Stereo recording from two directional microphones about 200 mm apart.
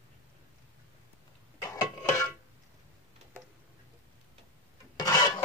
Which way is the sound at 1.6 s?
10° left (ahead or behind).